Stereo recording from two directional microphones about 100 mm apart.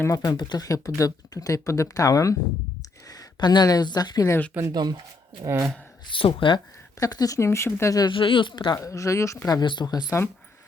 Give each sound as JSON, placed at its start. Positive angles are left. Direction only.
{"t": 0.0, "sound": "speech", "side_deg": 35}
{"t": 4.7, "sound": "speech", "side_deg": -45}
{"t": 5.4, "sound": "speech", "side_deg": -30}
{"t": 6.1, "sound": "speech", "side_deg": 60}
{"t": 7.0, "sound": "speech", "side_deg": 35}
{"t": 8.1, "sound": "speech", "side_deg": 60}
{"t": 8.7, "sound": "speech", "side_deg": 35}